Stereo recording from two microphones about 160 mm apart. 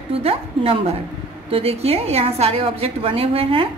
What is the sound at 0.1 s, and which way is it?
A woman's voice, 40° right (ahead or behind).